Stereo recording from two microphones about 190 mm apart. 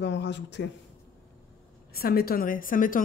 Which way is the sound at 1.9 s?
50° left (ahead or behind).